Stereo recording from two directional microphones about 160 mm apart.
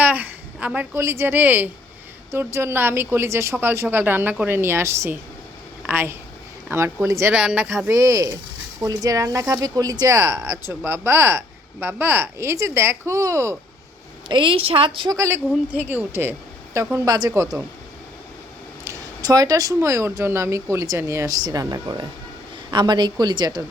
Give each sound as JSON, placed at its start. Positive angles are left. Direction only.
{"t": 0.0, "sound": "a woman's voice", "side_deg": -10}
{"t": 14.3, "sound": "a woman's voice", "side_deg": -30}
{"t": 15.7, "sound": "speech", "side_deg": -10}
{"t": 18.9, "sound": "speech", "side_deg": -20}